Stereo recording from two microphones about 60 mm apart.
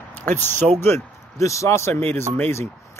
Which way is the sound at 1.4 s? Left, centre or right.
Left.